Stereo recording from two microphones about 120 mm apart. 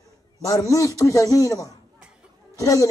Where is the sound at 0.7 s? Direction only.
30° left (ahead or behind).